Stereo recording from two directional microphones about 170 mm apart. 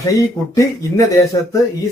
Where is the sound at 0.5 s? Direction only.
20° left (ahead or behind).